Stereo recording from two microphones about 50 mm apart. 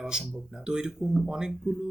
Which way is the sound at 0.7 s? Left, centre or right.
Centre.